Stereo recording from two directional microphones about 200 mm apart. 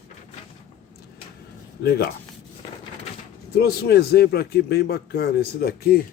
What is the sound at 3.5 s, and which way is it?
A man's voice, 50° left (ahead or behind).